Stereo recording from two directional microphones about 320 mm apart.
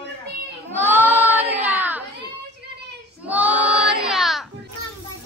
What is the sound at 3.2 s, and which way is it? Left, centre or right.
Child singing, centre.